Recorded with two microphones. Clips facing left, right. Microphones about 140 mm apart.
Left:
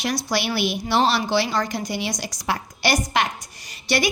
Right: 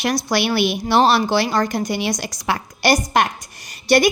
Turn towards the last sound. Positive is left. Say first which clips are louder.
# right 7 dB
turn(degrees=-50)  # may be behind; listen again after turning